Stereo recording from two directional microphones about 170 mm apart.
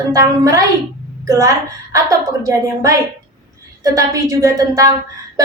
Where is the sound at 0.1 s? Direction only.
20° right (ahead or behind).